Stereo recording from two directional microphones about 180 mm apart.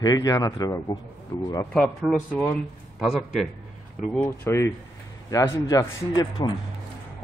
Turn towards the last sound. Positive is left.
turn(degrees=20)  # may be behind; listen again after turning